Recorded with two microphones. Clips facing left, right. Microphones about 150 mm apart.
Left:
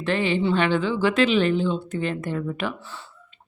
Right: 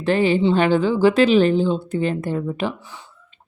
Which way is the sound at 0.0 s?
40° right (ahead or behind).